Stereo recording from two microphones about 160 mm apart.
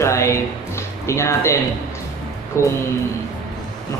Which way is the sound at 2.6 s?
15° left (ahead or behind).